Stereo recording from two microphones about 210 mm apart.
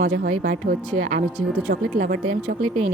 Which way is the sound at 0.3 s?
40° right (ahead or behind).